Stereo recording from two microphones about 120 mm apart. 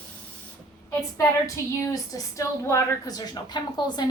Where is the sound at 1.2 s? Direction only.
25° left (ahead or behind).